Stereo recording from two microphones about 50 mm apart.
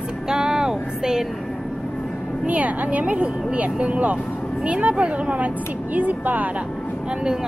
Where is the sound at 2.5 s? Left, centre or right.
Right.